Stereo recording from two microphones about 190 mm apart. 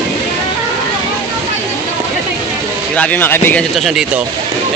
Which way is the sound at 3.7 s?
Centre (ahead or behind).